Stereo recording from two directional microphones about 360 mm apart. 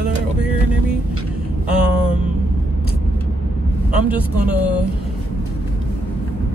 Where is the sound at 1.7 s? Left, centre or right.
Centre.